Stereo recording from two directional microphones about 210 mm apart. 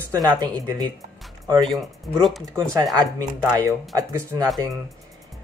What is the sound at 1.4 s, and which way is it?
Speech, 20° right (ahead or behind).